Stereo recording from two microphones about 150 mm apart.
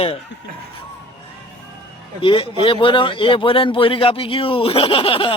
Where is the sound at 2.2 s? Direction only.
35° left (ahead or behind).